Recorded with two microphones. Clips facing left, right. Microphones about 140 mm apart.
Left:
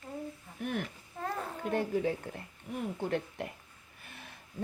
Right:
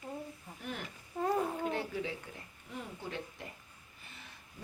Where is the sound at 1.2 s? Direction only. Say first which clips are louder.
Right 5 dB; 15° right (ahead or behind).